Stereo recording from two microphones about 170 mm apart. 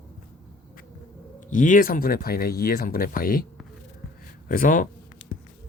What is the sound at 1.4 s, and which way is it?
Speech, 50° left (ahead or behind).